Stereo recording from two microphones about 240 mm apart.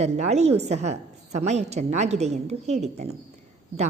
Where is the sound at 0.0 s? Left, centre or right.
Right.